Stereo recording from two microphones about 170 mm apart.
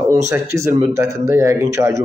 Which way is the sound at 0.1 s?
15° right (ahead or behind).